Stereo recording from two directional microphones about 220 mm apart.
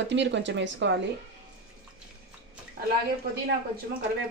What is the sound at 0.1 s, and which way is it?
Speech, 55° right (ahead or behind).